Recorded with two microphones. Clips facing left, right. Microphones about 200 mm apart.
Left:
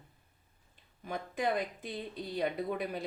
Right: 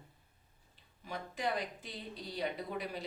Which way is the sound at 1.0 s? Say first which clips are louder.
Left 4 dB; 50° left (ahead or behind).